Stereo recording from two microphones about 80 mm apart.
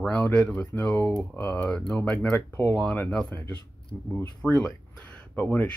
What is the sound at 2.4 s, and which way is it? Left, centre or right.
Speech, left.